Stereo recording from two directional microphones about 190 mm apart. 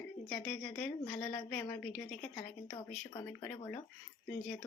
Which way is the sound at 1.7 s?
5° left (ahead or behind).